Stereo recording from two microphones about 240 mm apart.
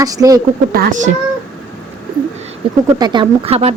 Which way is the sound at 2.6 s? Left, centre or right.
Right.